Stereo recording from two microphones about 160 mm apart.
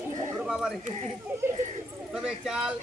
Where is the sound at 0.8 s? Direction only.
45° right (ahead or behind).